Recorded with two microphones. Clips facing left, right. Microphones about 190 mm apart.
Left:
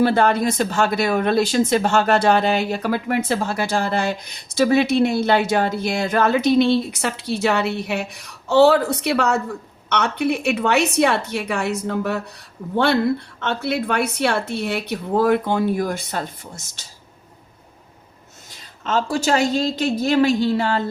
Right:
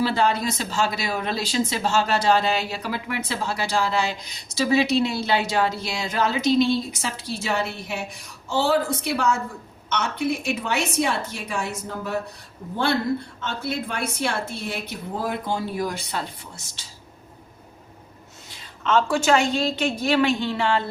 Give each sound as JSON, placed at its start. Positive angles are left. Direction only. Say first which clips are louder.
{"t": 0.0, "sound": "a woman's voice", "louder": "left 5 dB", "side_deg": 55}
{"t": 18.8, "sound": "a woman's voice", "louder": "even", "side_deg": 40}